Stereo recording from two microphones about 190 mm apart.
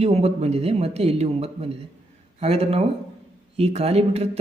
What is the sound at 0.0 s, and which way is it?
Speech, 35° right (ahead or behind).